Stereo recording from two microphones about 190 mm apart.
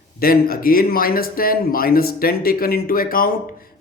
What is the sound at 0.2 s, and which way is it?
Speech, 50° left (ahead or behind).